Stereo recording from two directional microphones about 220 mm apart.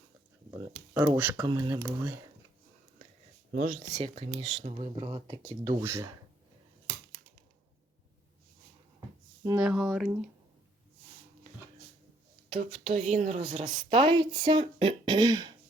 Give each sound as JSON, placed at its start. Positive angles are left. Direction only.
{"t": 0.7, "sound": "speech", "side_deg": -10}
{"t": 1.5, "sound": "speech", "side_deg": -20}
{"t": 3.5, "sound": "speech", "side_deg": -40}
{"t": 4.1, "sound": "speech", "side_deg": -25}
{"t": 9.6, "sound": "speech", "side_deg": -5}
{"t": 12.5, "sound": "speech", "side_deg": -35}
{"t": 14.0, "sound": "speech", "side_deg": -20}